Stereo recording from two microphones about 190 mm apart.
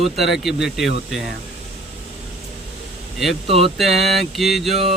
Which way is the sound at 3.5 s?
30° right (ahead or behind).